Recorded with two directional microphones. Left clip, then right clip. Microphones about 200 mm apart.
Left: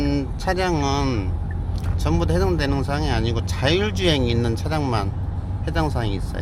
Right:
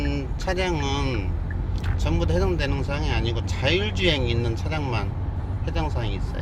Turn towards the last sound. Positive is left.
turn(degrees=25)  # may be behind; listen again after turning